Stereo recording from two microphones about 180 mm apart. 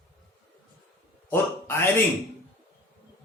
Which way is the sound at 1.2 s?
15° left (ahead or behind).